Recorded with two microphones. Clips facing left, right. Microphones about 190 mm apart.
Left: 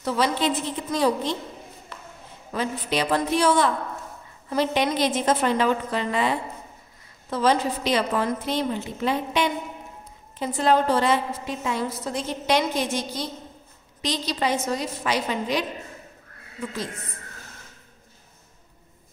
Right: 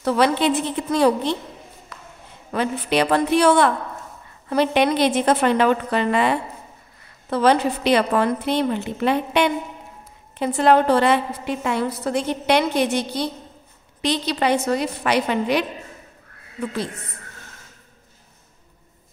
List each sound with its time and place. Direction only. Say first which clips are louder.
0.0 s a woman's voice: right 5 dB; 65° right (ahead or behind)
2.5 s a woman's voice: right 5 dB; 65° right (ahead or behind)